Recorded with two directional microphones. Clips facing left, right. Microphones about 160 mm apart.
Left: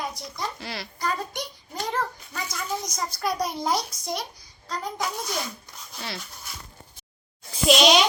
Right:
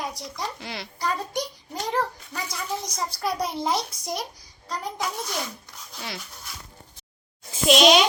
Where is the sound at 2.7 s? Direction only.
5° right (ahead or behind).